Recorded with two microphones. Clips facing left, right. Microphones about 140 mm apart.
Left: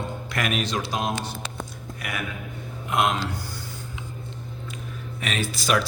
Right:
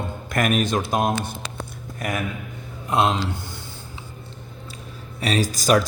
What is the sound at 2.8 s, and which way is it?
Speech, 30° right (ahead or behind).